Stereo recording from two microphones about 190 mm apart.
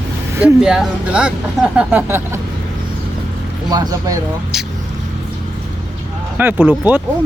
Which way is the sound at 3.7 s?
20° right (ahead or behind).